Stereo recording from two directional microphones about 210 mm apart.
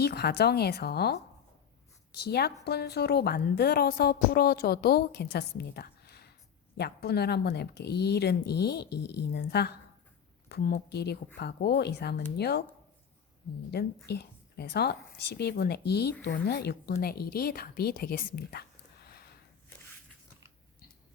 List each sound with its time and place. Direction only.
0.0 s a woman's voice: 50° left (ahead or behind)
2.2 s a woman's voice: 50° left (ahead or behind)
13.7 s a woman's voice: 50° left (ahead or behind)